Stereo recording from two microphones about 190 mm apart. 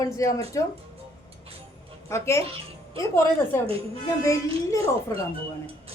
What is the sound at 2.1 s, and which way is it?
Speech, 15° left (ahead or behind).